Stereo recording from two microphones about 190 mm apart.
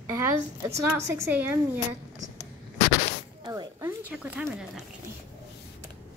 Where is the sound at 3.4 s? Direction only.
20° right (ahead or behind).